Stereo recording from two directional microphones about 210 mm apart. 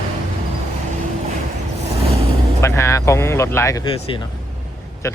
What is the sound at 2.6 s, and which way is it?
Speech, 15° left (ahead or behind).